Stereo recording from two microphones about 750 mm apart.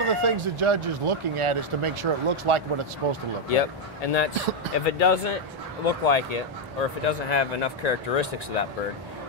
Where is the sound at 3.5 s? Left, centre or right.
Left.